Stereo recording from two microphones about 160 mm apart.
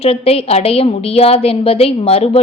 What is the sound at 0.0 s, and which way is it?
A woman's voice, 40° left (ahead or behind).